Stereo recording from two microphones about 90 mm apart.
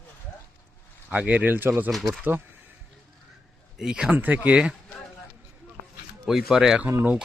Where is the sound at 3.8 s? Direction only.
10° right (ahead or behind).